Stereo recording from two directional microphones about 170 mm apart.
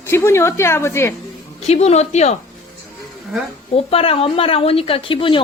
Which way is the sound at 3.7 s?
35° left (ahead or behind).